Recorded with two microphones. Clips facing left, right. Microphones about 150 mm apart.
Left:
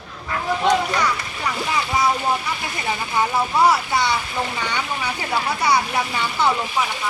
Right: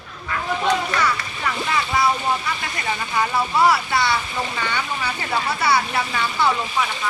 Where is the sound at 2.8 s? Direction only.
10° left (ahead or behind).